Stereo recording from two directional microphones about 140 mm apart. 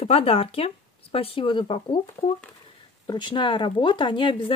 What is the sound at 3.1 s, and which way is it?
Speech, 35° left (ahead or behind).